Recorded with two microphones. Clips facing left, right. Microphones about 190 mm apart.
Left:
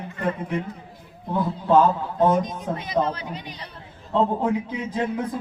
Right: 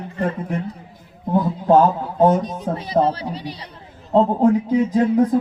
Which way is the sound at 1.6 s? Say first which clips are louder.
Right 2 dB; 45° right (ahead or behind).